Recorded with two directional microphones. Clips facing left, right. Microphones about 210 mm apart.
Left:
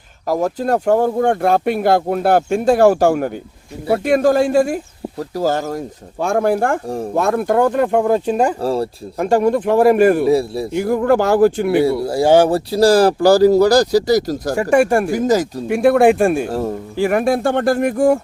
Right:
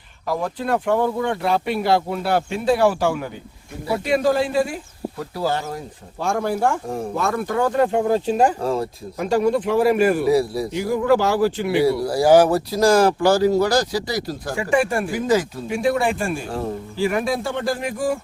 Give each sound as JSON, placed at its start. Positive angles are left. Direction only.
{"t": 0.3, "sound": "speech", "side_deg": 45}
{"t": 8.6, "sound": "speech", "side_deg": 35}
{"t": 9.1, "sound": "speech", "side_deg": 55}
{"t": 10.2, "sound": "a man's voice", "side_deg": 25}
{"t": 10.7, "sound": "speech", "side_deg": 55}
{"t": 11.8, "sound": "speech", "side_deg": 25}
{"t": 15.6, "sound": "speech", "side_deg": 60}
{"t": 16.5, "sound": "speech", "side_deg": 40}
{"t": 17.1, "sound": "speech", "side_deg": 55}